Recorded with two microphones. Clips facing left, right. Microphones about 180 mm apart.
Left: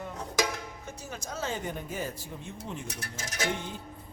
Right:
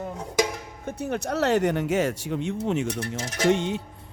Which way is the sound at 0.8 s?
60° right (ahead or behind).